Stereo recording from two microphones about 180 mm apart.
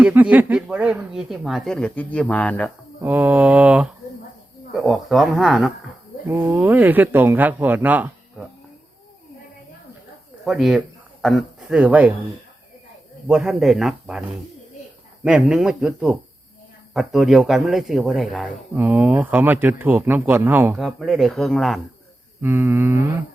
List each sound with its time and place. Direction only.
0.0 s speech: 10° right (ahead or behind); by 2.6 s 10° left (ahead or behind)
3.0 s speech: 10° right (ahead or behind)
6.2 s speech: 15° right (ahead or behind)
10.4 s speech: centre (ahead or behind)
13.2 s speech: 5° right (ahead or behind)
20.8 s speech: centre (ahead or behind)
22.4 s speech: 10° right (ahead or behind)